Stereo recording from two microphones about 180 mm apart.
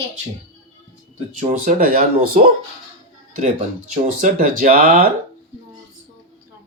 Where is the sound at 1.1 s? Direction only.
40° right (ahead or behind).